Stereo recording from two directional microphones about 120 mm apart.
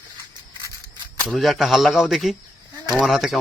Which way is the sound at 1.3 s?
Centre (ahead or behind).